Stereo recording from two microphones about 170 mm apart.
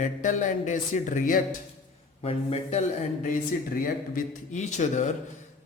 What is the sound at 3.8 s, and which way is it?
A man's voice, 50° left (ahead or behind).